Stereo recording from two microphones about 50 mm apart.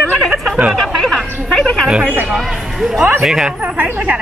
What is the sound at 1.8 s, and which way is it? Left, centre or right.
Speech, right.